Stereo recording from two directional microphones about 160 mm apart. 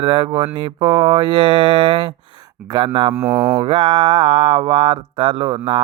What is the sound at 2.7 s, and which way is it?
Mantra, 30° right (ahead or behind).